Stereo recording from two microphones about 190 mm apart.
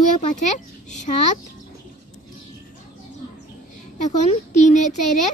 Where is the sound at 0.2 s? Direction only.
40° left (ahead or behind).